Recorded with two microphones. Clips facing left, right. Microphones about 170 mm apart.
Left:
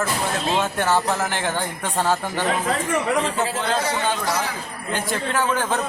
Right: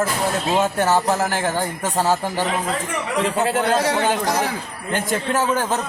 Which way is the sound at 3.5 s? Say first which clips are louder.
Right 5 dB; 70° right (ahead or behind).